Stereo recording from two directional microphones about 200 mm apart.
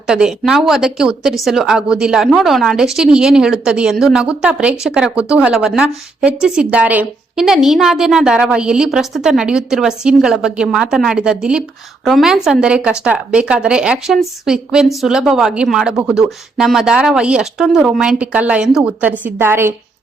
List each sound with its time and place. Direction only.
0.1 s speech: 5° right (ahead or behind)